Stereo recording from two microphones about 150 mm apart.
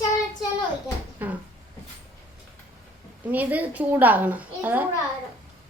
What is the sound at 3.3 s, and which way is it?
A woman's voice, 10° right (ahead or behind).